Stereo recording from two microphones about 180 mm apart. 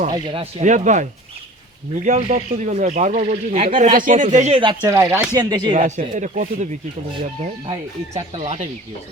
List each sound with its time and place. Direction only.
0.1 s speech: 25° right (ahead or behind)
0.6 s speech: 40° right (ahead or behind)
2.0 s speech: 40° right (ahead or behind)
4.8 s speech: 15° right (ahead or behind)
5.7 s speech: 45° right (ahead or behind)
8.1 s speech: 40° right (ahead or behind)